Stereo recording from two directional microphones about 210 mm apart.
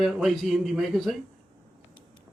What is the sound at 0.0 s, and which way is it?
Speech, centre (ahead or behind).